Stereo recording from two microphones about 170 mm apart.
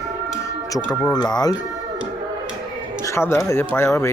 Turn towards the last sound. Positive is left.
turn(degrees=15)  # may be behind; listen again after turning